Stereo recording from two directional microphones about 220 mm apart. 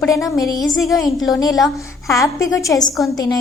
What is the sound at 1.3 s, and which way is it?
A woman's voice, 15° left (ahead or behind).